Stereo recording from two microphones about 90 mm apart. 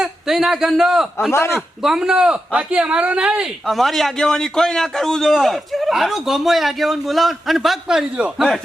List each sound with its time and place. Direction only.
0.0 s a man's voice: 5° right (ahead or behind)
1.3 s a man's voice: 30° left (ahead or behind)
1.8 s speech: 5° right (ahead or behind)
3.7 s a man's voice: centre (ahead or behind)